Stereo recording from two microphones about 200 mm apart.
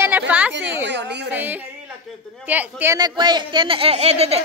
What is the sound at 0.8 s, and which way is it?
Speech, 60° right (ahead or behind).